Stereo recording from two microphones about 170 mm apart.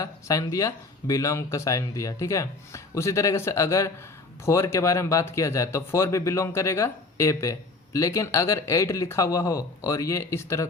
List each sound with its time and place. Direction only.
0.0 s speech: 20° left (ahead or behind)